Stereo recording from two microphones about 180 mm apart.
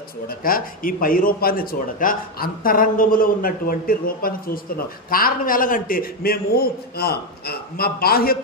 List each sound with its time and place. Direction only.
0.3 s a man's voice: 55° left (ahead or behind)